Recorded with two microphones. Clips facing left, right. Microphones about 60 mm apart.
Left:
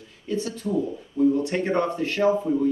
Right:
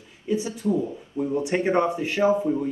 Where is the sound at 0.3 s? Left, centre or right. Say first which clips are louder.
Right 2 dB; centre.